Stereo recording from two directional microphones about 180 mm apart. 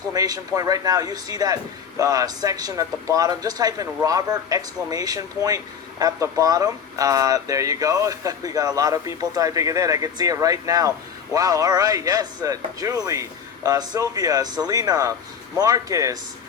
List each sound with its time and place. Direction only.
0.1 s speech: 20° right (ahead or behind)